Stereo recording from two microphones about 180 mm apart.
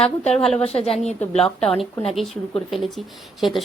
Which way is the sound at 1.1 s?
5° left (ahead or behind).